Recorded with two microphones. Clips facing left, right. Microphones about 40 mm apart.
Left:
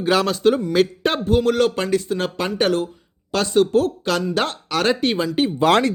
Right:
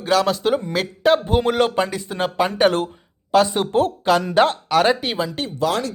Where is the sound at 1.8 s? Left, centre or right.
Centre.